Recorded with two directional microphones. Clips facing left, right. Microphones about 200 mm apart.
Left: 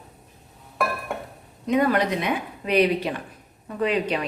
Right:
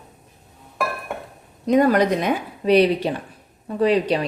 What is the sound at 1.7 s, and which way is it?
A woman's voice, 40° right (ahead or behind).